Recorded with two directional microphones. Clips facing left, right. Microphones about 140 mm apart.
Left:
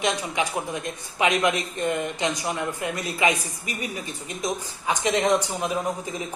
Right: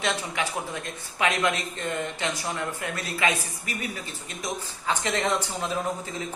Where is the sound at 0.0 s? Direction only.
20° left (ahead or behind).